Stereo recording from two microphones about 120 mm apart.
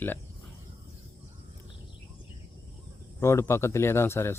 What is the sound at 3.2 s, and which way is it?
Speech, 20° left (ahead or behind).